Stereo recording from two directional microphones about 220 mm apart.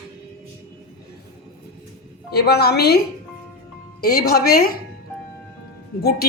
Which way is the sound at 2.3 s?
45° left (ahead or behind).